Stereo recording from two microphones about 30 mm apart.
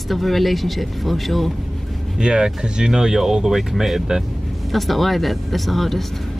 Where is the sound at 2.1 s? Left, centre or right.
Right; by 4.0 s centre.